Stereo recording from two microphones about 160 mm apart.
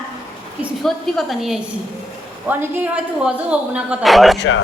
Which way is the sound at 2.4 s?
10° right (ahead or behind).